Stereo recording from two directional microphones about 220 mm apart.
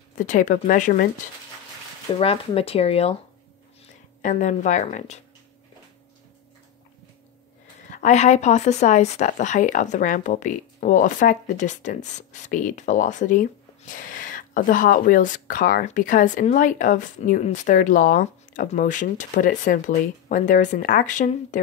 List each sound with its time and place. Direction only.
0.2 s speech: 35° left (ahead or behind)
2.1 s speech: 25° left (ahead or behind)
7.9 s speech: 30° left (ahead or behind)